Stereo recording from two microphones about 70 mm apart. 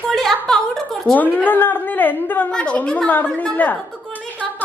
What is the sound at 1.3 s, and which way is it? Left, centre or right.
A woman's voice, left.